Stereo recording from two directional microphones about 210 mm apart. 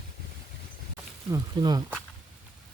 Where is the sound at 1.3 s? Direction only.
15° right (ahead or behind).